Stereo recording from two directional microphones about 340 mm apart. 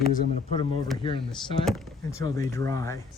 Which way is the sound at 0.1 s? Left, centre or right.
Centre.